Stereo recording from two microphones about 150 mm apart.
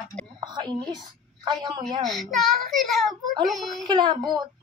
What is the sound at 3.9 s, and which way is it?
Speech, 30° right (ahead or behind).